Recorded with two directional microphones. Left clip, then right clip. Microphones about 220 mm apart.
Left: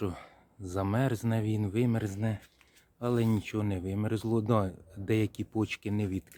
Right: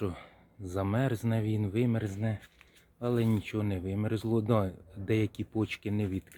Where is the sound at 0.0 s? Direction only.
5° left (ahead or behind).